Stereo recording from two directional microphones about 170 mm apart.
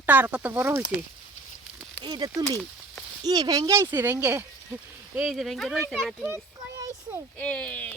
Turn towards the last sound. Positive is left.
turn(degrees=10)  # may be behind; listen again after turning